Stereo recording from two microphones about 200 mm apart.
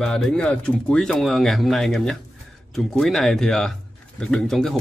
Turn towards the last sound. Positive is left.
turn(degrees=0)  # may be behind; listen again after turning